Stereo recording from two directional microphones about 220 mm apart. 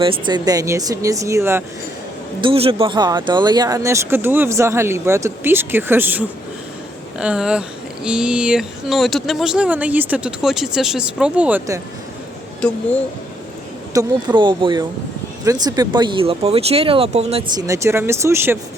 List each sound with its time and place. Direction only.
0.0 s speech: 20° right (ahead or behind)
2.4 s speech: 25° right (ahead or behind)
13.9 s speech: 20° right (ahead or behind)